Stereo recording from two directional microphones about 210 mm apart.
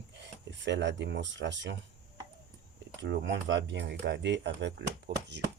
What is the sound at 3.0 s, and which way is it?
Speech, 55° right (ahead or behind).